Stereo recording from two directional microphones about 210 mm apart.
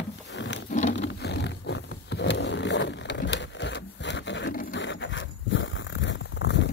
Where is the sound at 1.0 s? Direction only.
55° left (ahead or behind).